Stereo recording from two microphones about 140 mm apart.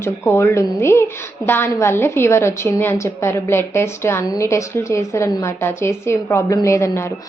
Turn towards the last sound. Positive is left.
turn(degrees=20)  # may be behind; listen again after turning